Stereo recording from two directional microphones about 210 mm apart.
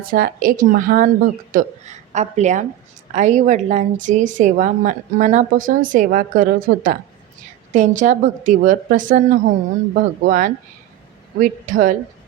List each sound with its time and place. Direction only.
0.0 s a woman's voice: 40° right (ahead or behind)